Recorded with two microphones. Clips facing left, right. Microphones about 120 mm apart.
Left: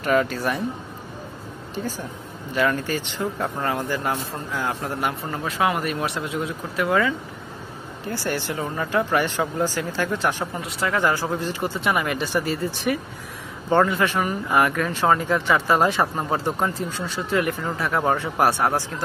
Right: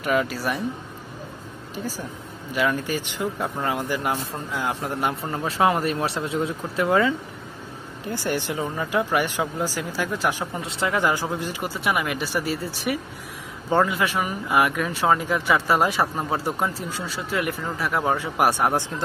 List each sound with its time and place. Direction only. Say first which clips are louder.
0.0 s speech: left 2 dB; 5° right (ahead or behind)
2.5 s speech: left 1 dB; 10° right (ahead or behind)
10.6 s speech: even; 20° right (ahead or behind)